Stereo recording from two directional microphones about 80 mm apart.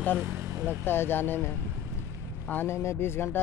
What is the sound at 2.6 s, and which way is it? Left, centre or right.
Speech, left.